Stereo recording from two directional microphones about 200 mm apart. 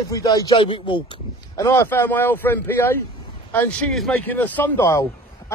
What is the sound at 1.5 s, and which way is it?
Speech, 15° left (ahead or behind).